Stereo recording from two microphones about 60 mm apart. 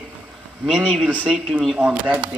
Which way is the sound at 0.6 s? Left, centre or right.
Centre.